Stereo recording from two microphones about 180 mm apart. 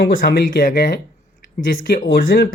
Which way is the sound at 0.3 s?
55° left (ahead or behind).